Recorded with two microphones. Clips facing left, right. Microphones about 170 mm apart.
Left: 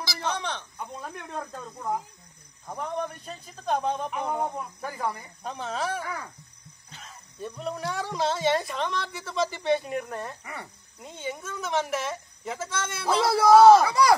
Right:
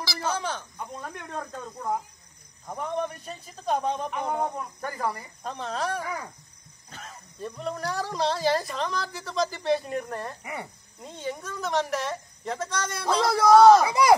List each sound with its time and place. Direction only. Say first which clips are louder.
0.2 s a man's voice: right 1 dB; 5° right (ahead or behind)
6.9 s speech: right 5 dB; 50° right (ahead or behind)
7.3 s a man's voice: even; centre (ahead or behind)
10.4 s speech: right 4 dB; 20° right (ahead or behind)
11.0 s a man's voice: right 1 dB; centre (ahead or behind)
13.8 s speech: even; 20° right (ahead or behind)